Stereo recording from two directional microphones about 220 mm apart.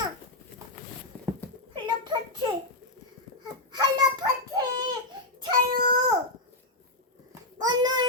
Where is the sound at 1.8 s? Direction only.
20° right (ahead or behind).